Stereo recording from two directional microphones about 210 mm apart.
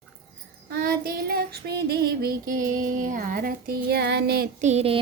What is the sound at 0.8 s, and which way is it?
Child singing, 45° right (ahead or behind).